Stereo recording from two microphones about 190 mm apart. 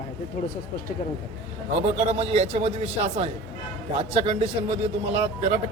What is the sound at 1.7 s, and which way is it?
A man's voice, 35° right (ahead or behind).